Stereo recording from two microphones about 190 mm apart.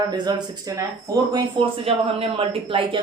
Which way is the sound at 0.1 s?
20° right (ahead or behind).